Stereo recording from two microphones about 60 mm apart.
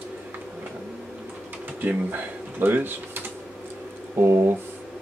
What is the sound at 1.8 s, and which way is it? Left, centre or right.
Speech, right.